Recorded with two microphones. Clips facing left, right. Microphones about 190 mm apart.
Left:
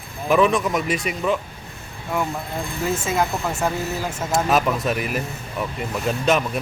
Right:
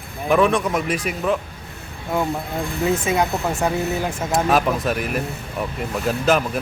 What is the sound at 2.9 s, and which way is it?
Speech, 15° right (ahead or behind).